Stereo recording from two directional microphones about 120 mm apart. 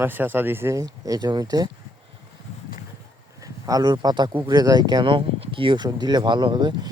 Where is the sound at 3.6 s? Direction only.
30° right (ahead or behind).